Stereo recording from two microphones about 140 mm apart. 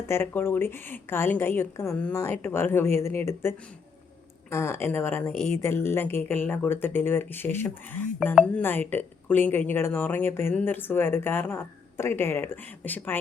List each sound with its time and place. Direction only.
0.1 s speech: 15° left (ahead or behind)
4.5 s speech: 15° left (ahead or behind)